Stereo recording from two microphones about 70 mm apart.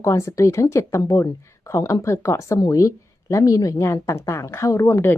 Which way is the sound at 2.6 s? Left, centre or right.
Left.